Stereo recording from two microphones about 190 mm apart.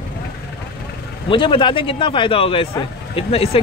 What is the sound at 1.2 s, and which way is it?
A man's voice, 25° left (ahead or behind).